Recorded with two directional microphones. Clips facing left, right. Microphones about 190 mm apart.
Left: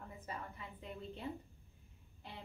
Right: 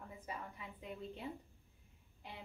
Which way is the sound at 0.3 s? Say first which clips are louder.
Even; 10° right (ahead or behind).